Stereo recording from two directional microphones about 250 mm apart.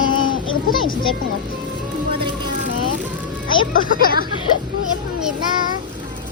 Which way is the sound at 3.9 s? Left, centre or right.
Left.